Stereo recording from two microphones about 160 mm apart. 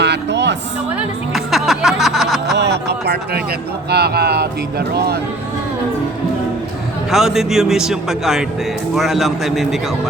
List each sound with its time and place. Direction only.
0.0 s music: 90° right
1.3 s music: centre (ahead or behind)
2.6 s speech: 90° right
7.1 s a man's voice: centre (ahead or behind)